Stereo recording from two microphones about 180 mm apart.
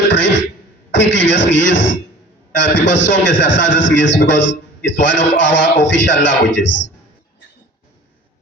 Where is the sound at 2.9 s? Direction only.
90° left.